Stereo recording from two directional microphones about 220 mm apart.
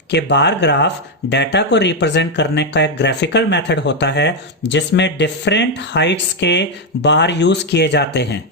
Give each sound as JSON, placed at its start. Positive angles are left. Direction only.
{"t": 0.1, "sound": "speech", "side_deg": 50}